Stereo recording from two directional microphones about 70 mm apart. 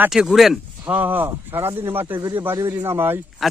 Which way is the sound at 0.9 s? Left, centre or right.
Right.